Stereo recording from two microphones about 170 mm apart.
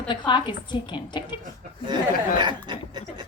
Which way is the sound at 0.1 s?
25° left (ahead or behind).